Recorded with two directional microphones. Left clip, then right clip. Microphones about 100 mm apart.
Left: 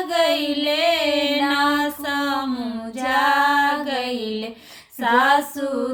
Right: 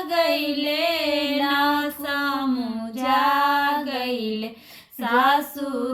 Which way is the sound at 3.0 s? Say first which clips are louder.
Left 2 dB; 35° left (ahead or behind).